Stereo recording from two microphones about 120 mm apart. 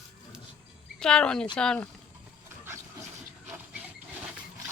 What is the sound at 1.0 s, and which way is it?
Speech, 5° left (ahead or behind).